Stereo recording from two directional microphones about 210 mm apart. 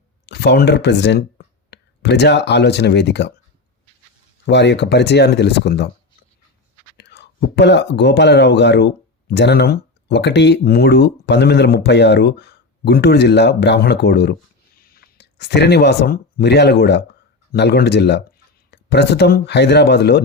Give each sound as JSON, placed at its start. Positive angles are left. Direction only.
{"t": 0.3, "sound": "speech", "side_deg": 55}
{"t": 4.4, "sound": "speech", "side_deg": 55}
{"t": 6.9, "sound": "speech", "side_deg": 55}